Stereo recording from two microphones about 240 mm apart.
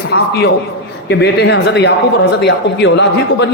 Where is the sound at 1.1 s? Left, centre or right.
Left.